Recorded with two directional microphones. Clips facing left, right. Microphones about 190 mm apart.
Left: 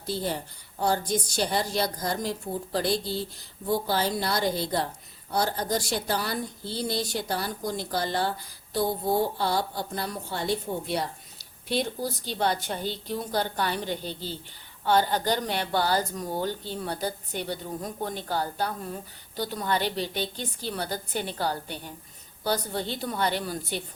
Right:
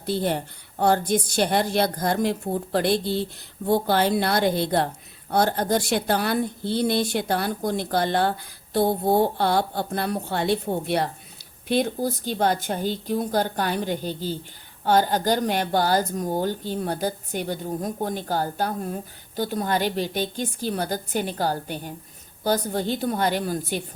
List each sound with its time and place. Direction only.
0.0 s a woman's voice: 60° right (ahead or behind); by 23.6 s 45° right (ahead or behind)